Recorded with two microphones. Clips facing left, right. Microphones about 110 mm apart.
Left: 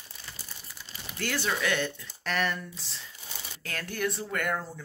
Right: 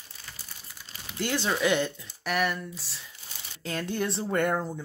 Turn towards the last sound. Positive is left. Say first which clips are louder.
# right 5 dB
turn(degrees=-20)  # may be behind; listen again after turning